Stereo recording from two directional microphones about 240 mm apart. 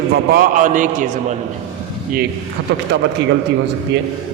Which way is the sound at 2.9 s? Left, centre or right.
Right.